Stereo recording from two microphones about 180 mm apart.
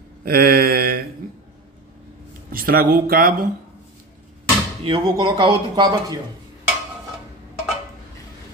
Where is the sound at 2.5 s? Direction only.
55° right (ahead or behind).